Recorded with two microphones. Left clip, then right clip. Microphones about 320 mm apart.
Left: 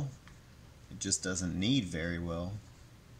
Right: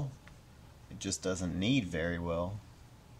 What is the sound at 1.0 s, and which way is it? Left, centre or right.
Speech, centre.